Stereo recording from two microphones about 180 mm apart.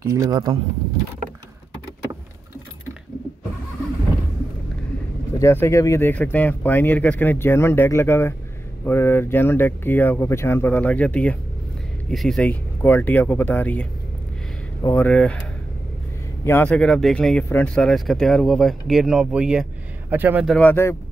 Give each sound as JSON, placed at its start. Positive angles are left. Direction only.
{"t": 0.0, "sound": "speech", "side_deg": -20}
{"t": 5.4, "sound": "speech", "side_deg": 15}
{"t": 16.4, "sound": "speech", "side_deg": 10}
{"t": 20.4, "sound": "speech", "side_deg": 5}